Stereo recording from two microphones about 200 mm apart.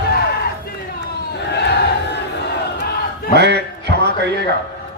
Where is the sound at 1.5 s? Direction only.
55° left (ahead or behind).